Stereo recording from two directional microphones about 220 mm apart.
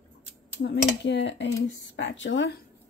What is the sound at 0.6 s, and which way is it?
A woman's voice, 50° left (ahead or behind).